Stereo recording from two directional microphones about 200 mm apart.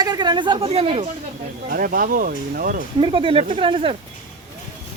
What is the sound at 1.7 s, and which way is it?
Speech, 45° right (ahead or behind).